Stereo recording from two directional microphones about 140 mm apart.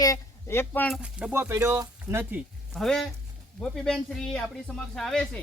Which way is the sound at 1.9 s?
15° right (ahead or behind).